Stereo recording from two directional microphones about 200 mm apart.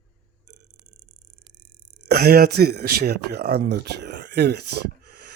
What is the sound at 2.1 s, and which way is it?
Speech, 50° right (ahead or behind).